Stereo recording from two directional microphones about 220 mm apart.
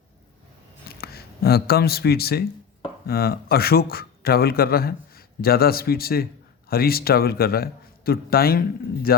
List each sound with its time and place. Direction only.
0.9 s a man's voice: 45° left (ahead or behind)